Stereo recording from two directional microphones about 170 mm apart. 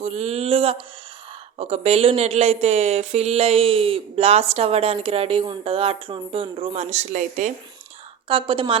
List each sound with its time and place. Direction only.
0.0 s a sound: 40° right (ahead or behind)
1.5 s speech: 35° right (ahead or behind)
8.3 s speech: 30° right (ahead or behind)